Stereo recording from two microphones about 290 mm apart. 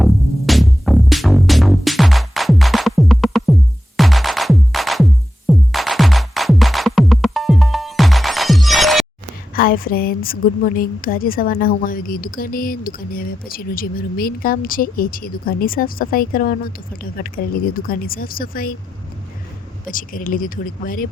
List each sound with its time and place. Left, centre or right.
0.0 s music: centre
9.6 s a woman's voice: left
19.8 s a woman's voice: left